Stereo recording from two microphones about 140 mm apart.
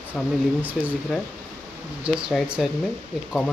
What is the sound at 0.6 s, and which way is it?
Speech, 10° right (ahead or behind).